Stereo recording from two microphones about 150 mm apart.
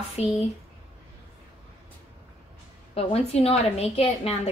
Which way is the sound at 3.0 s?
45° left (ahead or behind).